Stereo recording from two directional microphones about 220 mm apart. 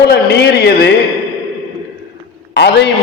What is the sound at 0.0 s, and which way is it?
Speech, 50° left (ahead or behind).